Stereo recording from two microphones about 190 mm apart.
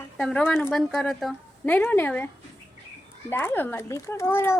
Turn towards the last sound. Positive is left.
turn(degrees=10)  # may be behind; listen again after turning